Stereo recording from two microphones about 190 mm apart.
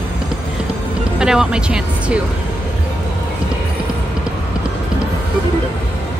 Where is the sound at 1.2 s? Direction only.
5° right (ahead or behind).